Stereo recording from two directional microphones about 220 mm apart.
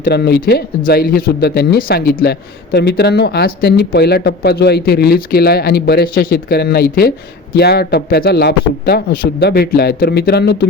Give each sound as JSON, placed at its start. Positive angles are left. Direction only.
{"t": 0.0, "sound": "speech", "side_deg": 45}